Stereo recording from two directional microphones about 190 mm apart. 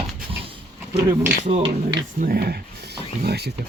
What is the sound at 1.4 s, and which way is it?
Speech, 35° right (ahead or behind).